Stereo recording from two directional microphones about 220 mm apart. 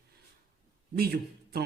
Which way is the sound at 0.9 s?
45° right (ahead or behind).